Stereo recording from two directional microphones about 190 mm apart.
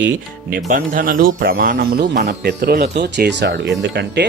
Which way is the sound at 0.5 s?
45° right (ahead or behind).